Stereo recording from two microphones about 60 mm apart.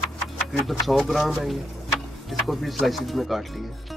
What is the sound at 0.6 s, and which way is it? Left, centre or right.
Speech, centre.